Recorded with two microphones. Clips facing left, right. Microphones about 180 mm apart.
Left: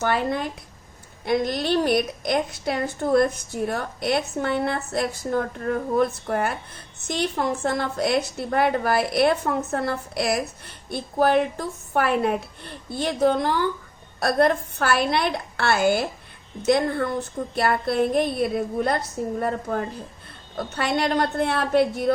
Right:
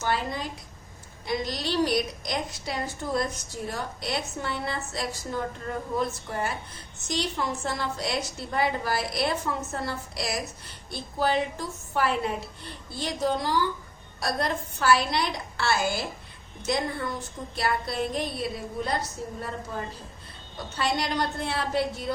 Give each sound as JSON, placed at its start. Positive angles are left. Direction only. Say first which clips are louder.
{"t": 0.0, "sound": "a woman's voice", "louder": "left 5 dB", "side_deg": 55}